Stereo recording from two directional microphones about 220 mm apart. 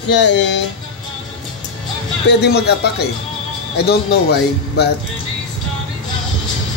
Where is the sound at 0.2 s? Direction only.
55° left (ahead or behind).